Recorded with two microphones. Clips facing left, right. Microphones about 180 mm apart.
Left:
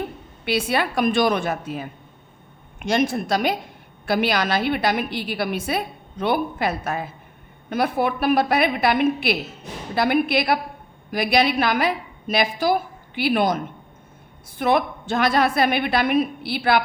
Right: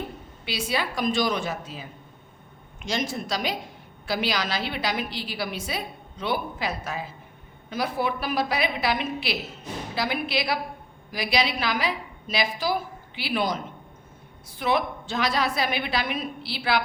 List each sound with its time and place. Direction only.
0.4 s a woman's voice: 60° left (ahead or behind)
14.6 s a woman's voice: 50° left (ahead or behind)